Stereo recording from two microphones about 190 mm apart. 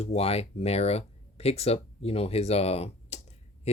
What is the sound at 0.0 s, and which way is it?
Speech, 35° left (ahead or behind).